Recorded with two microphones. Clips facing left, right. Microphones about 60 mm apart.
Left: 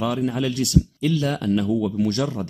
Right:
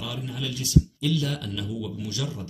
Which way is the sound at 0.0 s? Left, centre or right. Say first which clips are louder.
Left 11 dB; left.